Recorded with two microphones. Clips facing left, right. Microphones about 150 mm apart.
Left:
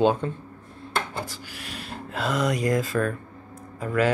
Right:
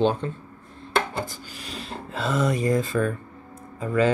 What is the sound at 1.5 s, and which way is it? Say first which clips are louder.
Speech: right 2 dB; centre (ahead or behind).